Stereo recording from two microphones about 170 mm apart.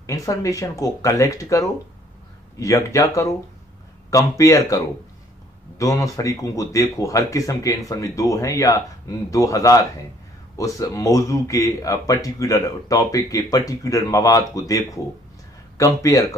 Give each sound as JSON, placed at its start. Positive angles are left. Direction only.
{"t": 0.0, "sound": "speech", "side_deg": 20}